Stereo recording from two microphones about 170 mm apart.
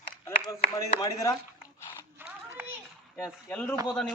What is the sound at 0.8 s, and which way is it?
Speech, 20° left (ahead or behind).